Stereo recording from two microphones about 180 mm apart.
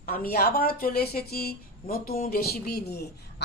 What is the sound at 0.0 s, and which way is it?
Speech, 55° left (ahead or behind).